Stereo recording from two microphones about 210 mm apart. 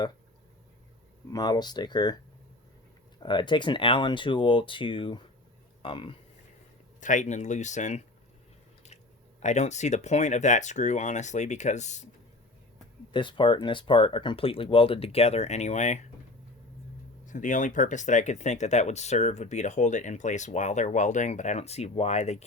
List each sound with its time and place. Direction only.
1.3 s speech: 20° left (ahead or behind)
3.2 s speech: 20° left (ahead or behind)
7.0 s speech: 35° left (ahead or behind)
9.4 s speech: 35° left (ahead or behind)
13.1 s speech: 25° left (ahead or behind)
17.2 s speech: 40° left (ahead or behind)